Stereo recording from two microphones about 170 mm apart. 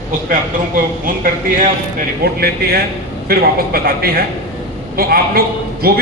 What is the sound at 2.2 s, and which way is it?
A man's voice, 65° right (ahead or behind).